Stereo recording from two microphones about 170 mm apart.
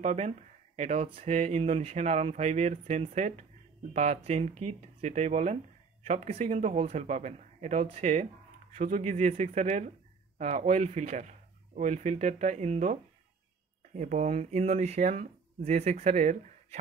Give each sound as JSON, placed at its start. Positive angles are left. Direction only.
{"t": 0.0, "sound": "speech", "side_deg": -45}